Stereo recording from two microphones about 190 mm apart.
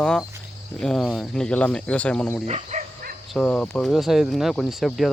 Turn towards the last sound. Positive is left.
turn(degrees=0)  # may be behind; listen again after turning